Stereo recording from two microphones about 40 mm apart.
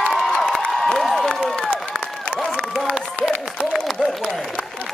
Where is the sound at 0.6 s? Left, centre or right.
Centre.